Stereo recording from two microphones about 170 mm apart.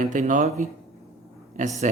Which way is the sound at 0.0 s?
45° right (ahead or behind).